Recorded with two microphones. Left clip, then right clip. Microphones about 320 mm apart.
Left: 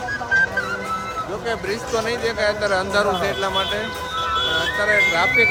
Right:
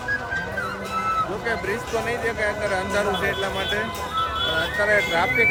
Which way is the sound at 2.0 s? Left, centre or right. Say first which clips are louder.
Left 4 dB; centre.